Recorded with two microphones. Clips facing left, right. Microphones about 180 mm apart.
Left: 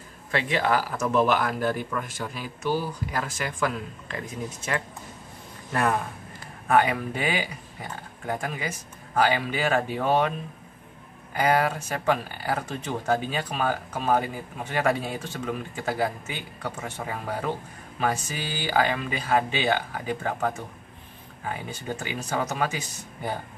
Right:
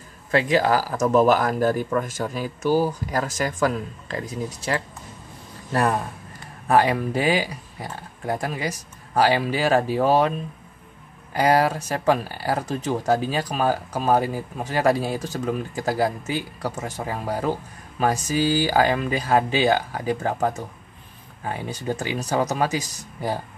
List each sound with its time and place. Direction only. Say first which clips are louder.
0.3 s speech: right 5 dB; 40° right (ahead or behind)
11.3 s speech: right 4 dB; 35° right (ahead or behind)